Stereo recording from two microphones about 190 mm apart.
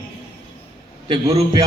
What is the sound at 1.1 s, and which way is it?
Speech, 25° right (ahead or behind).